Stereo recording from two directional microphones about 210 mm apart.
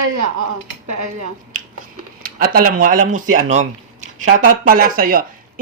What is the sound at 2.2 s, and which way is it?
Speech, 45° right (ahead or behind).